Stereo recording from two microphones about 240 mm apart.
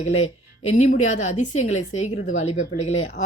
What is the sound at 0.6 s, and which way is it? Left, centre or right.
A woman's voice, left.